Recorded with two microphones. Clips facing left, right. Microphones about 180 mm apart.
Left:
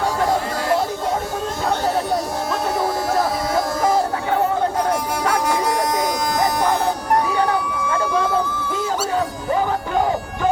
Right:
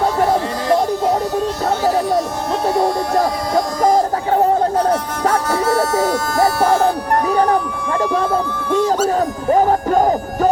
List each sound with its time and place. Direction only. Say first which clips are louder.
3.8 s music: right 4 dB; 40° right (ahead or behind)
5.5 s music: right 3 dB; 15° left (ahead or behind)
9.1 s music: right 5 dB; 45° right (ahead or behind)